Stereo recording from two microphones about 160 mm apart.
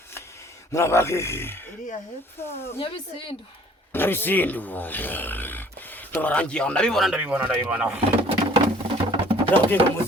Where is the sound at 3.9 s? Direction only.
15° left (ahead or behind); by 8.0 s 10° right (ahead or behind).